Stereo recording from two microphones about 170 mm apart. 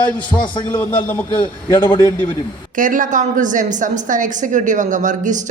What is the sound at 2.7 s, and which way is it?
A woman's voice, 50° right (ahead or behind).